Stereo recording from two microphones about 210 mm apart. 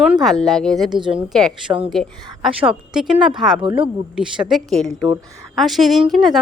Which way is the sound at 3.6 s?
25° right (ahead or behind).